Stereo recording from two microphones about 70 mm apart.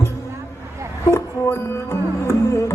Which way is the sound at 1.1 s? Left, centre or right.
Left.